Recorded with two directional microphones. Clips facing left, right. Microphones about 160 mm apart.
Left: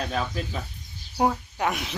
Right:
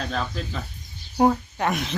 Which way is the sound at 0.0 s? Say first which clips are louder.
Even; 5° left (ahead or behind).